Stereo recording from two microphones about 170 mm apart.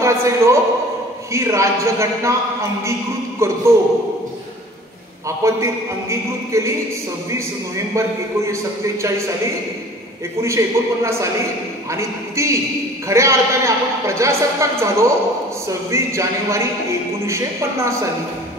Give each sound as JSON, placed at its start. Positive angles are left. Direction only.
{"t": 0.0, "sound": "a man's voice", "side_deg": -15}
{"t": 3.3, "sound": "a man's voice", "side_deg": -15}
{"t": 5.4, "sound": "a man's voice", "side_deg": -15}